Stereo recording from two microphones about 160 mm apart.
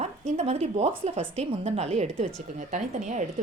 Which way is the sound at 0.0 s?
45° right (ahead or behind).